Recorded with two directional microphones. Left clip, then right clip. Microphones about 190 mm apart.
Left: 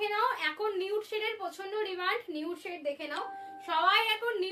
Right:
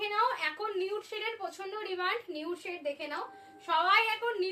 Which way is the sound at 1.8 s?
15° left (ahead or behind).